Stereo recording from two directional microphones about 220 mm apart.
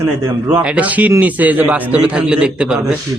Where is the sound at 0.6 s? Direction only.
5° right (ahead or behind).